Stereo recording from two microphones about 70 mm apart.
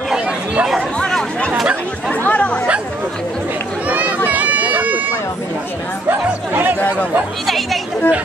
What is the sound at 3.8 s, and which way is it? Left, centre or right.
Run, right.